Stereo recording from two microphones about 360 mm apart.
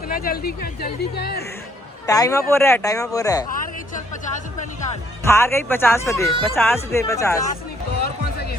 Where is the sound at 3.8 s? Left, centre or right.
Left.